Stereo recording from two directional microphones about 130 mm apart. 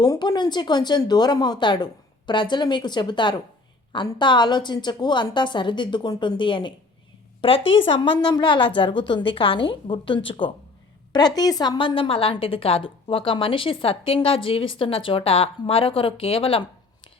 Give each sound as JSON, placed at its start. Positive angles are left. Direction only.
{"t": 0.0, "sound": "speech", "side_deg": 30}
{"t": 11.3, "sound": "a woman's voice", "side_deg": 30}